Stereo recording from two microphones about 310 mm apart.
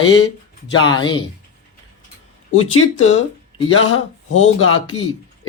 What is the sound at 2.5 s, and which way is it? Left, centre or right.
A man's voice, left.